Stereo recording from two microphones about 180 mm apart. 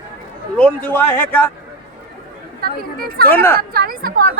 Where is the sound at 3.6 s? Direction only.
55° right (ahead or behind).